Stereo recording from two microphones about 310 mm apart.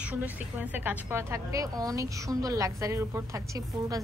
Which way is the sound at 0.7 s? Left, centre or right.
Centre.